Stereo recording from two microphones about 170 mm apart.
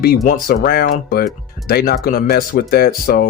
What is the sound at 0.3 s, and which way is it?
Speech, 60° left (ahead or behind).